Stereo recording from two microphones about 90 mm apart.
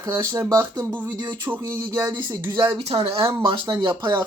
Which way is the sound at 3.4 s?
60° right (ahead or behind).